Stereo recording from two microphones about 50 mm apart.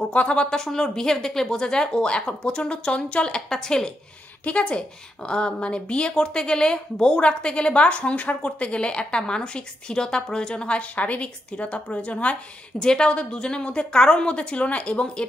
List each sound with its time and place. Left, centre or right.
0.1 s a woman's voice: left
4.5 s a woman's voice: left